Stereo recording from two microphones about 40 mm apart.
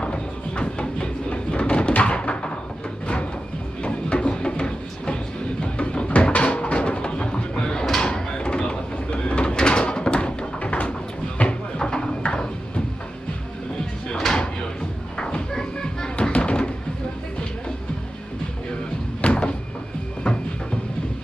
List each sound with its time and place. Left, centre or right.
0.0 s music: left
2.0 s a sound: left
3.8 s music: left
8.1 s a sound: left
14.2 s a sound: centre
15.1 s music: left
16.2 s music: left
19.2 s door: left
20.2 s music: left